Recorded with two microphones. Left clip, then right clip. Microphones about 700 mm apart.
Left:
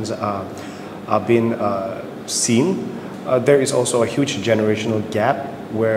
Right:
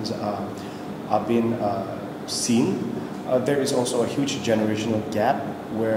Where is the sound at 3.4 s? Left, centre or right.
Left.